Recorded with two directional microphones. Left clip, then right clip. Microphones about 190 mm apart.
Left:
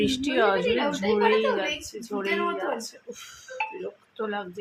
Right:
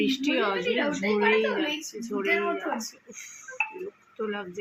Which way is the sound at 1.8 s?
40° left (ahead or behind).